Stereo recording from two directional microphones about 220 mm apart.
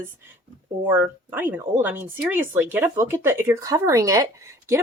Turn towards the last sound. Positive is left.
turn(degrees=-15)  # may be behind; listen again after turning